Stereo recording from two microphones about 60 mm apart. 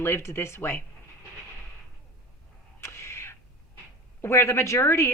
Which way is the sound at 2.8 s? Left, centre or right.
Left.